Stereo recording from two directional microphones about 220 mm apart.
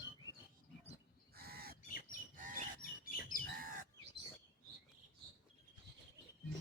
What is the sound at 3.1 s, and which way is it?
Bird, 40° left (ahead or behind).